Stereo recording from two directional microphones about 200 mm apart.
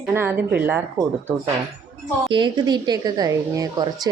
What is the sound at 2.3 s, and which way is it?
A woman's voice, 25° right (ahead or behind).